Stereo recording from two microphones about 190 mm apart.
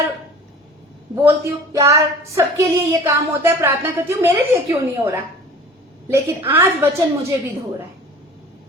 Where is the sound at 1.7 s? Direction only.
15° right (ahead or behind).